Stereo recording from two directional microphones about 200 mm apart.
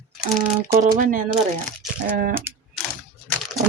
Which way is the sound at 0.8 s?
40° right (ahead or behind).